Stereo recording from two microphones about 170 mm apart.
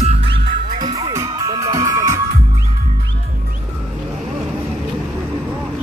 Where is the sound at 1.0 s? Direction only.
20° right (ahead or behind).